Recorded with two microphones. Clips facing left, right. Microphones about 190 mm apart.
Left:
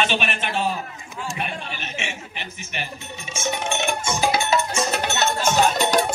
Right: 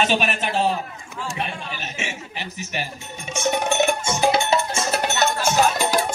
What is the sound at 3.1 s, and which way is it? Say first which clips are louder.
Music: right 5 dB; 55° right (ahead or behind).